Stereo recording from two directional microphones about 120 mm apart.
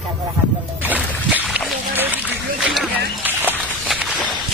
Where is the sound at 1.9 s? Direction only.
15° right (ahead or behind).